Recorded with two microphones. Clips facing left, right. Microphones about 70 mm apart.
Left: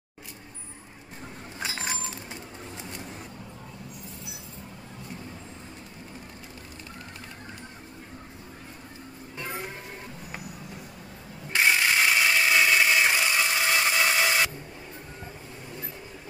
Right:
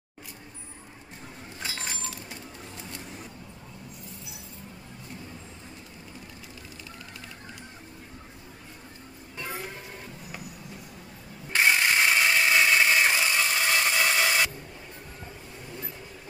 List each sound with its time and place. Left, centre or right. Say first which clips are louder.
1.6 s chink: left 3 dB; centre
11.5 s ratchet: even; centre